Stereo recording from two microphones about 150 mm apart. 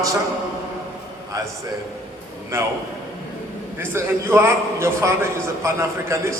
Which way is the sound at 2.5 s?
15° right (ahead or behind).